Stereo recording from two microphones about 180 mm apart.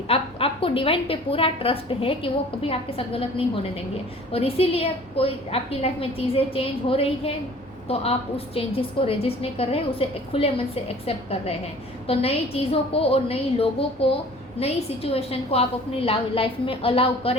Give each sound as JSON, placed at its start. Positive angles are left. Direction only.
{"t": 0.1, "sound": "a woman's voice", "side_deg": 30}